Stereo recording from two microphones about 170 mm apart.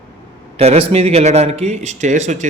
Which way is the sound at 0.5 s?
35° right (ahead or behind).